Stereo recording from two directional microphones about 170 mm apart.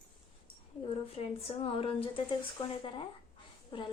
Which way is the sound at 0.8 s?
35° left (ahead or behind).